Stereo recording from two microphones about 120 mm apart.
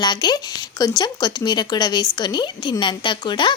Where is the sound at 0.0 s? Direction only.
35° left (ahead or behind).